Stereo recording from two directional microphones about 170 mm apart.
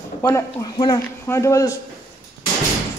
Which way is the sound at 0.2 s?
15° left (ahead or behind).